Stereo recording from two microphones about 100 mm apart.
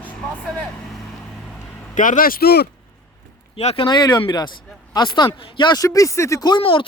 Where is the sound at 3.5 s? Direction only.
80° left.